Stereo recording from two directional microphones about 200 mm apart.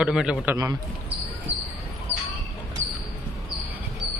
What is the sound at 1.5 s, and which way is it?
Basketball bounce, 30° right (ahead or behind).